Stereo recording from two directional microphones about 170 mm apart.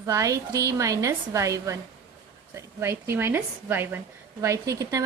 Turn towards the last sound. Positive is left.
turn(degrees=-20)  # may be behind; listen again after turning